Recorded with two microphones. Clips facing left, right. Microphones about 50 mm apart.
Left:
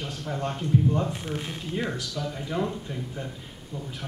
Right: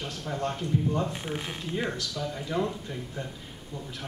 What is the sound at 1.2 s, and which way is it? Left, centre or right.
Speech, centre.